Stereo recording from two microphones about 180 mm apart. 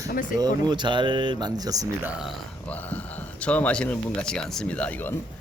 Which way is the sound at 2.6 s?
10° left (ahead or behind).